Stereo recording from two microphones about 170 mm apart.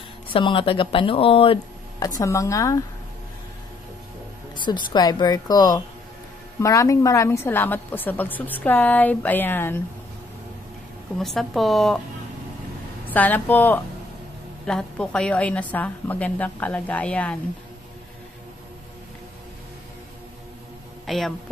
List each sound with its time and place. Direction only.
0.3 s speech: 30° left (ahead or behind)
2.0 s speech: 20° left (ahead or behind)
4.6 s a woman's voice: 25° left (ahead or behind)
11.1 s a woman's voice: centre (ahead or behind)
13.1 s a woman's voice: 10° left (ahead or behind)
21.1 s a woman's voice: centre (ahead or behind)